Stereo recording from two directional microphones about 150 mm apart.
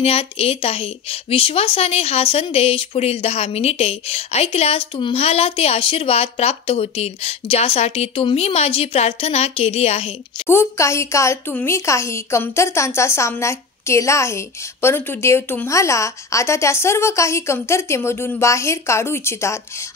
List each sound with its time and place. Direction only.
0.0 s speech: 45° left (ahead or behind)
10.5 s a woman's voice: 20° left (ahead or behind)